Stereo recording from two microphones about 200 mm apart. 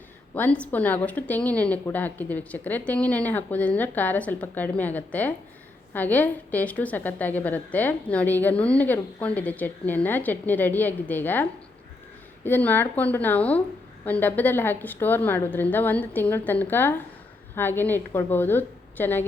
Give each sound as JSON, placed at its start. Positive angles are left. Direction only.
{"t": 0.3, "sound": "a woman's voice", "side_deg": 5}
{"t": 12.5, "sound": "a woman's voice", "side_deg": 10}